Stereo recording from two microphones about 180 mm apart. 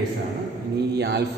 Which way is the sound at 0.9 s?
65° right (ahead or behind).